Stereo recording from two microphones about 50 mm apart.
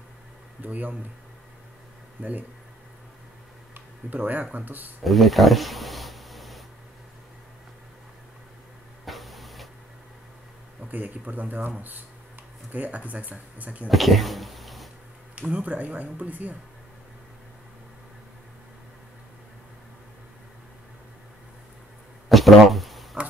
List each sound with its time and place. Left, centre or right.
0.6 s speech: right
2.2 s speech: right
4.2 s speech: right
5.0 s a sound: centre
9.0 s printer: centre
10.9 s speech: right
12.7 s speech: right
13.8 s speech: centre
15.5 s speech: right
22.3 s a sound: centre